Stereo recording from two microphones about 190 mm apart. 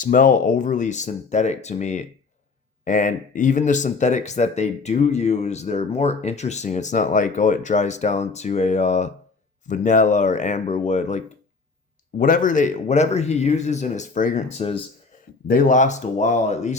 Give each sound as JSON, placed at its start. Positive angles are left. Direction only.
{"t": 0.0, "sound": "speech", "side_deg": 45}
{"t": 15.4, "sound": "speech", "side_deg": 45}